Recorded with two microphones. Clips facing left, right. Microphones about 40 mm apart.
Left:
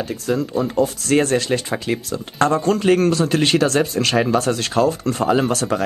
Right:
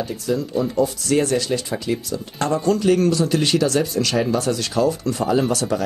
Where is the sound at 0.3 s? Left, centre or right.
Left.